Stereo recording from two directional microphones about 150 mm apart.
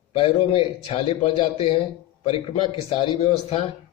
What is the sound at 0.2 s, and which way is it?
A man's voice, 40° left (ahead or behind).